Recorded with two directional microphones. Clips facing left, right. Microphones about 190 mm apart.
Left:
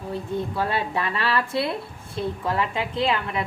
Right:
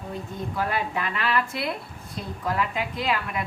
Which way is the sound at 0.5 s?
30° left (ahead or behind).